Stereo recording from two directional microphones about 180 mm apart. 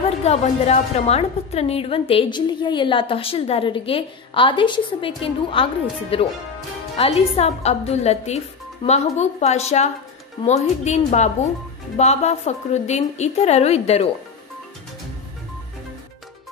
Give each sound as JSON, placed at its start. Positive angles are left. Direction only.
{"t": 0.2, "sound": "a woman's voice", "side_deg": 35}